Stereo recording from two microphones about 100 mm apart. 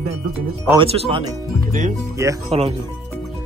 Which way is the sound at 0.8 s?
70° right (ahead or behind).